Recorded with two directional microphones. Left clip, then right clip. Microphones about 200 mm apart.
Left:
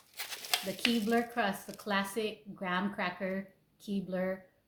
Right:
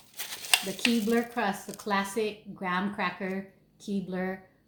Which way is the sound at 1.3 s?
15° left (ahead or behind).